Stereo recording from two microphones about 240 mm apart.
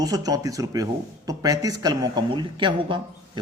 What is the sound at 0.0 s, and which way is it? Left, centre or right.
Speech, centre.